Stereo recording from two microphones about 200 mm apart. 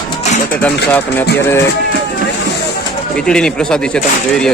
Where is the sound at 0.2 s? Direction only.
35° left (ahead or behind).